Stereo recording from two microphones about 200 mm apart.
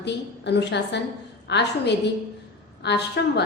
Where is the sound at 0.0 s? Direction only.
60° left (ahead or behind).